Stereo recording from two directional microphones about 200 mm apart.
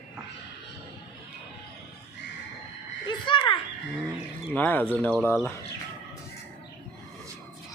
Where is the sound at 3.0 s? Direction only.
25° left (ahead or behind).